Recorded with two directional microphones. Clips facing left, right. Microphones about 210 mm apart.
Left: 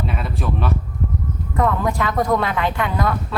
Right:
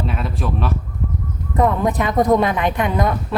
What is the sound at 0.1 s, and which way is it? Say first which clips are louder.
Speech: right 1 dB; centre (ahead or behind).